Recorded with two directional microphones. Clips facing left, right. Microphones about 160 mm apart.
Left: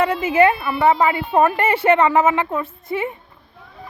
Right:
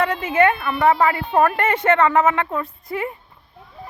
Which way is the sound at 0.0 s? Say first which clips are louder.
Left 2 dB; 5° left (ahead or behind).